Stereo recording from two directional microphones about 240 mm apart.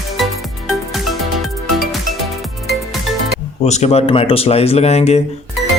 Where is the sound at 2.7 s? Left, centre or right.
Centre.